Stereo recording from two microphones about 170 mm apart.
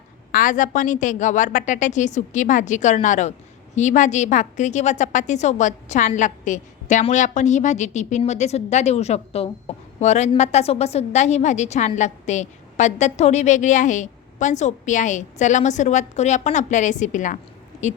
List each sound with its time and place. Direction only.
0.3 s a woman's voice: 55° left (ahead or behind)